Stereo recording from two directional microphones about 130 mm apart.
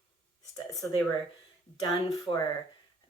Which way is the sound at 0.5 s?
25° left (ahead or behind).